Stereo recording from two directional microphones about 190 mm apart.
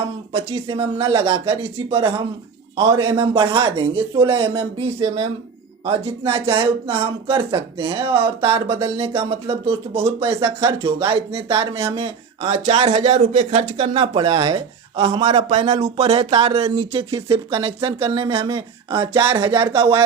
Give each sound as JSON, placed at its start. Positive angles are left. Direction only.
{"t": 0.3, "sound": "speech", "side_deg": -30}
{"t": 15.4, "sound": "speech", "side_deg": -35}